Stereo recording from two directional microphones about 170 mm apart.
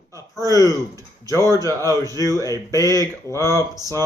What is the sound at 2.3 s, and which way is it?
Speech, 20° left (ahead or behind).